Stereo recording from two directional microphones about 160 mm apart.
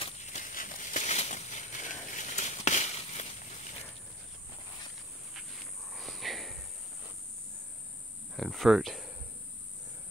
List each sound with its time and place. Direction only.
0.0 s a sound: 45° left (ahead or behind)
5.3 s walk: centre (ahead or behind)
8.4 s cricket: centre (ahead or behind)